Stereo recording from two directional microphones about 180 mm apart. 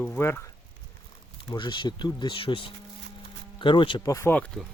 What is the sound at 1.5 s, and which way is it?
Speech, 25° left (ahead or behind).